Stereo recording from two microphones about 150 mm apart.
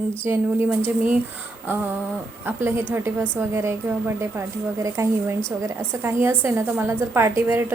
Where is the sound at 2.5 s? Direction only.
15° right (ahead or behind).